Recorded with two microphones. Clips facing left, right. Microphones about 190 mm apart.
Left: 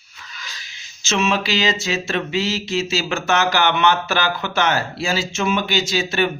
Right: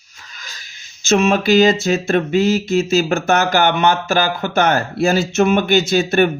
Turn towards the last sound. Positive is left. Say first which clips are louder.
# right 6 dB
turn(degrees=-55)  # may be behind; listen again after turning